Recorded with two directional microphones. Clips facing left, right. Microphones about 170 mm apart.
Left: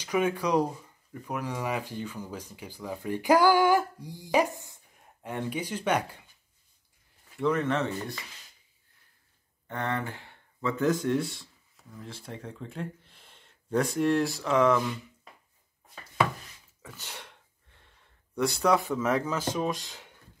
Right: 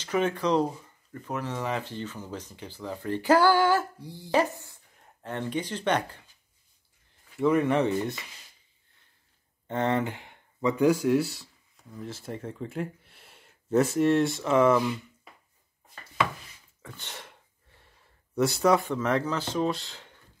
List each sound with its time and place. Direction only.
0.0 s speech: 10° left (ahead or behind)
7.3 s speech: 10° right (ahead or behind)
9.7 s speech: 20° right (ahead or behind); by 15.0 s 5° right (ahead or behind)
16.8 s gasp: 5° left (ahead or behind)
18.9 s speech: 10° left (ahead or behind)